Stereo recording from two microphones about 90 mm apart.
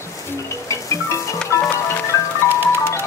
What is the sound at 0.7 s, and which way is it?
Music, 35° left (ahead or behind).